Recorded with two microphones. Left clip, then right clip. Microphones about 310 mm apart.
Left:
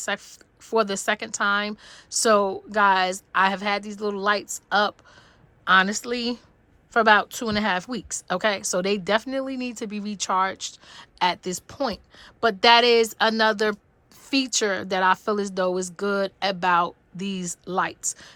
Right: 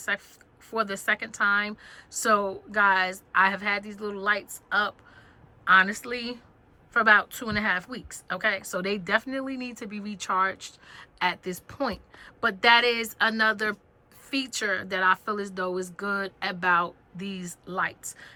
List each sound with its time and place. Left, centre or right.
0.0 s a woman's voice: centre